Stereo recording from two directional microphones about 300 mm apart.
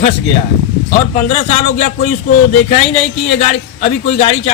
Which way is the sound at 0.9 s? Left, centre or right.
Left.